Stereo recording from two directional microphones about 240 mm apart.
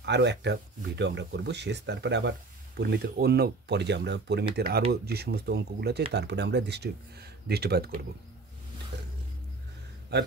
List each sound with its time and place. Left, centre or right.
0.0 s speech: right
10.1 s speech: right